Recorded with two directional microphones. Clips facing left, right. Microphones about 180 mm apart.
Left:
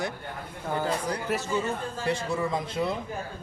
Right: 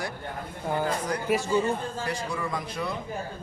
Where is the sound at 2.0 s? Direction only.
25° left (ahead or behind).